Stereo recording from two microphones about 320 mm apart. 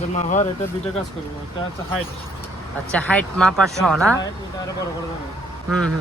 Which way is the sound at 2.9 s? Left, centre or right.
Centre.